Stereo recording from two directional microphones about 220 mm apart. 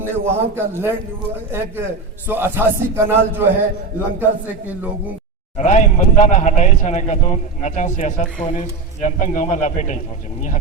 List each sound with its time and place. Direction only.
0.0 s a man's voice: 10° right (ahead or behind)
5.5 s speech: 30° left (ahead or behind)